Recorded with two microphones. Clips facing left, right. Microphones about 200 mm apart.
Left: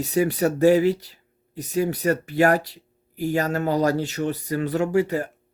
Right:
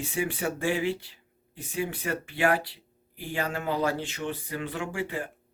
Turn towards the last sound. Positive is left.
turn(degrees=40)  # may be behind; listen again after turning